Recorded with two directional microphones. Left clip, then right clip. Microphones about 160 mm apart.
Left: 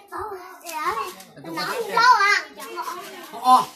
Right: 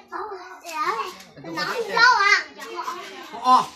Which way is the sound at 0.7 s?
Centre (ahead or behind).